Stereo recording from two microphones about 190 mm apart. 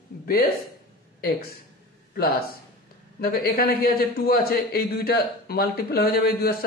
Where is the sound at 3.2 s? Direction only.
55° left (ahead or behind).